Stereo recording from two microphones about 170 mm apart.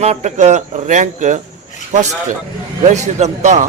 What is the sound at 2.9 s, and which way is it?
Speech, 40° right (ahead or behind).